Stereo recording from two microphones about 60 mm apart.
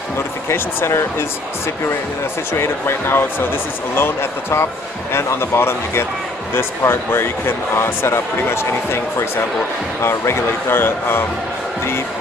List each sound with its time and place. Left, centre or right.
0.5 s speech: left
2.5 s speech: left